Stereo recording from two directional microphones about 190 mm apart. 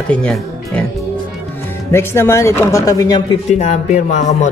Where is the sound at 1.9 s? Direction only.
15° left (ahead or behind).